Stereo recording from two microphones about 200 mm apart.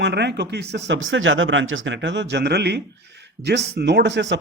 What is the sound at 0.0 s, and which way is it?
Speech, 60° right (ahead or behind).